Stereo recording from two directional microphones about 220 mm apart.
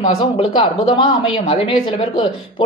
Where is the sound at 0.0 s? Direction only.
35° left (ahead or behind).